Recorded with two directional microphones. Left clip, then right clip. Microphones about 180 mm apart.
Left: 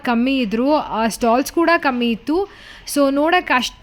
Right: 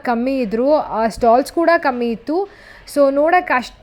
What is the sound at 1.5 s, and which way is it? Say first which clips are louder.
Speech: right 1 dB; 40° left (ahead or behind).